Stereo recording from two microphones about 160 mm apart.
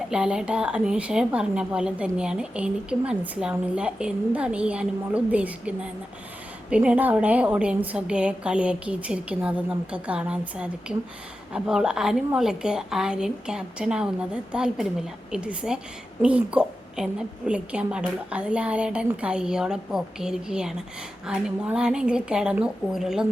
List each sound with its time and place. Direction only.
0.1 s a woman's voice: 5° right (ahead or behind)